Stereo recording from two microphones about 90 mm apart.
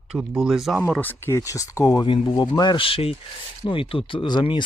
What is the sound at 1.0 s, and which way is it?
Speech, 20° left (ahead or behind).